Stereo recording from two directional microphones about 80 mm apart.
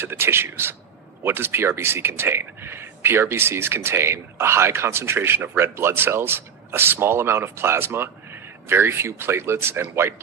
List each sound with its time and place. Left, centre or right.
0.0 s speech: right